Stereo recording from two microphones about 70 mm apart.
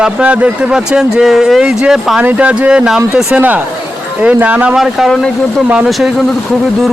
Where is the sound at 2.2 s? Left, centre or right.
Centre.